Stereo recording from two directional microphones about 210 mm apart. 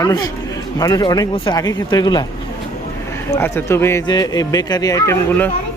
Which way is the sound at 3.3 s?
10° left (ahead or behind).